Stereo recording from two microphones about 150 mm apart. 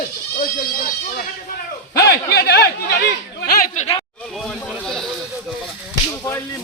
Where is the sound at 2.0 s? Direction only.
90° left.